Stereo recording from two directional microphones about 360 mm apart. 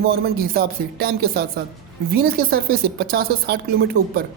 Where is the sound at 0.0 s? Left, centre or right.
Right.